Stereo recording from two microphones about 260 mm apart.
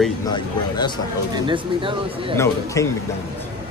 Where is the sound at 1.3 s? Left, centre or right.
Centre.